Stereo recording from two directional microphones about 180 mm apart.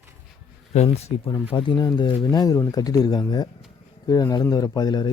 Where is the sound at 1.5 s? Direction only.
25° left (ahead or behind).